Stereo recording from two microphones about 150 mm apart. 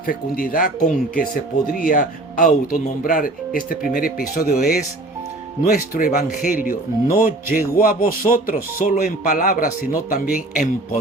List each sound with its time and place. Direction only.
0.1 s speech: 70° left (ahead or behind); by 4.8 s 85° left
5.6 s speech: 70° left (ahead or behind)